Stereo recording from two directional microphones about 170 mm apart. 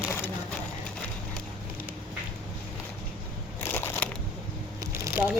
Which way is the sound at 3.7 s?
15° left (ahead or behind).